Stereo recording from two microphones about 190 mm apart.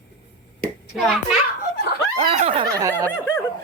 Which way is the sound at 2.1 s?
35° right (ahead or behind).